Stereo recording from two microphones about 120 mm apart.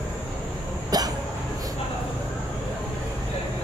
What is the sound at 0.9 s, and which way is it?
Hiccup, 35° right (ahead or behind).